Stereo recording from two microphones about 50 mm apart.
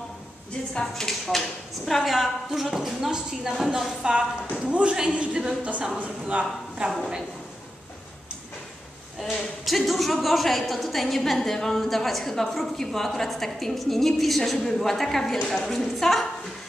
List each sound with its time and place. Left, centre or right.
0.5 s a woman's voice: centre; by 6.4 s right
6.9 s a woman's voice: centre
9.2 s a woman's voice: centre